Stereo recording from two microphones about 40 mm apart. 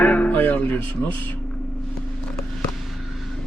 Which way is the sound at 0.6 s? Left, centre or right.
Left.